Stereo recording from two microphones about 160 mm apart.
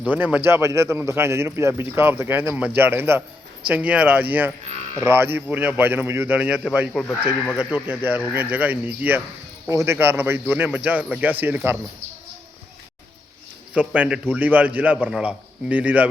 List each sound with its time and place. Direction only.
0.0 s a man's voice: 10° right (ahead or behind)
13.7 s a man's voice: 10° right (ahead or behind)